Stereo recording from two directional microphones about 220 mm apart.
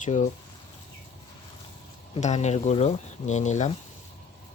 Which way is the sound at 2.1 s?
30° left (ahead or behind).